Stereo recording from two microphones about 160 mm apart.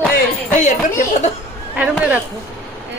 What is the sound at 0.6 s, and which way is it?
Speech, 50° left (ahead or behind).